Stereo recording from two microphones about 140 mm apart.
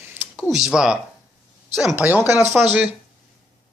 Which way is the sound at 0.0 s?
15° right (ahead or behind).